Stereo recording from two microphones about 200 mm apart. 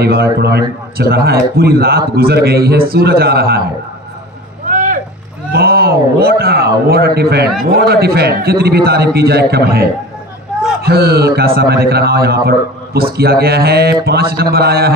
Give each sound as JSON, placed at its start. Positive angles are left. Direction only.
{"t": 0.0, "sound": "a man's voice", "side_deg": -55}
{"t": 4.6, "sound": "vehicle", "side_deg": -40}
{"t": 5.5, "sound": "a man's voice", "side_deg": -50}